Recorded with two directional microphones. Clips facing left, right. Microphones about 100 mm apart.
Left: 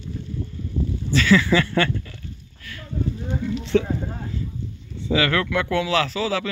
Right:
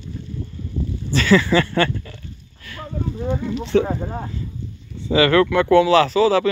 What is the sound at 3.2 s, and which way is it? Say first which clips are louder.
Speech: right 4 dB; 60° right (ahead or behind).